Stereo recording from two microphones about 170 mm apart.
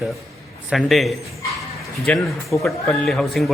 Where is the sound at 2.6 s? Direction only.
Centre (ahead or behind).